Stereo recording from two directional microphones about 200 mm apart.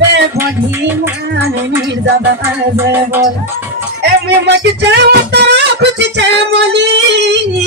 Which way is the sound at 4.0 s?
60° right (ahead or behind).